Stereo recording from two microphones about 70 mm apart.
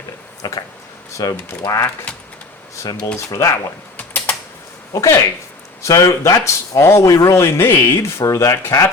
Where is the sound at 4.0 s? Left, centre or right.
Left.